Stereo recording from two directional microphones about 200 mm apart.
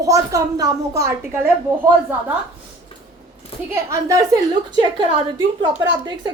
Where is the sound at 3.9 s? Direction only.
15° right (ahead or behind).